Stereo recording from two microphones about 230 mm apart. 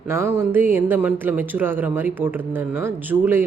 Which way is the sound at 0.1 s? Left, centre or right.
Centre.